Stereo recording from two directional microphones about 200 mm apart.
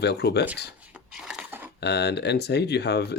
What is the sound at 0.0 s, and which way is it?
Speech, 55° left (ahead or behind).